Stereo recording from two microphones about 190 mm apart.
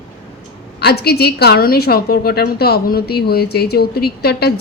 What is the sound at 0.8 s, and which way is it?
A woman's voice, 60° left (ahead or behind).